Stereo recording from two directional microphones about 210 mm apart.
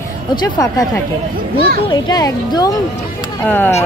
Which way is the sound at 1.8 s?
20° left (ahead or behind).